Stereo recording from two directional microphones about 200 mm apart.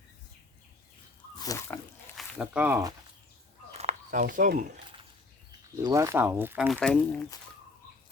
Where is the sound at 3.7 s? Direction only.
30° right (ahead or behind).